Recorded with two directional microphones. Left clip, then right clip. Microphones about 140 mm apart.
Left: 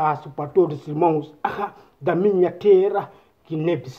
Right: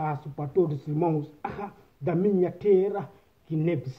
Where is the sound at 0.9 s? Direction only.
5° right (ahead or behind).